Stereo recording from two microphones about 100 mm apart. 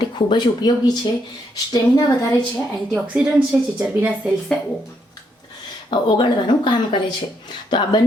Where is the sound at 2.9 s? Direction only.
10° right (ahead or behind).